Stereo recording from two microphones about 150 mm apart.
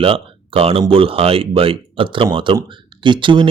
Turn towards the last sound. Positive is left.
turn(degrees=-35)  # may be behind; listen again after turning